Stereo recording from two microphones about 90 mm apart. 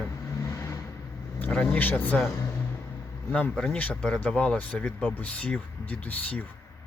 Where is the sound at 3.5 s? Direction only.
10° left (ahead or behind).